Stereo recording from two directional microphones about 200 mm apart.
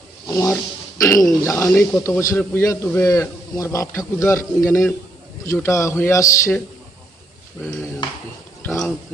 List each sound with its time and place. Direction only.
0.3 s a man's voice: 15° left (ahead or behind)
8.6 s speech: 10° left (ahead or behind)